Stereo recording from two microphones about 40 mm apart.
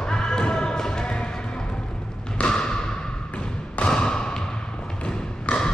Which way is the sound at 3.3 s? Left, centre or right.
Left.